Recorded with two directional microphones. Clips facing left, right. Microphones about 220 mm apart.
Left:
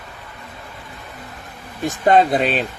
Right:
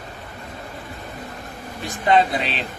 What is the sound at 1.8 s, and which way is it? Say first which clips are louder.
Speech: left 4 dB; 45° left (ahead or behind).